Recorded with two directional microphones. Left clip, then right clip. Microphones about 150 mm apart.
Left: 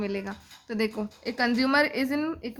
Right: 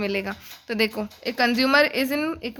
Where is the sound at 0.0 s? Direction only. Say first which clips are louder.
Right 6 dB; 25° right (ahead or behind).